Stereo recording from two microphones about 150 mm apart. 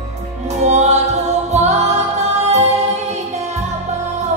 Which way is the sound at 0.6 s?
50° right (ahead or behind).